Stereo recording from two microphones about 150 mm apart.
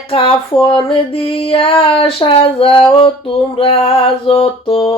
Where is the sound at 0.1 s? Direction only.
35° left (ahead or behind).